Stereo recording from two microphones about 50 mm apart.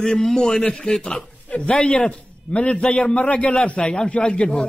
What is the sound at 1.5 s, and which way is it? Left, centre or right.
A man's voice, left.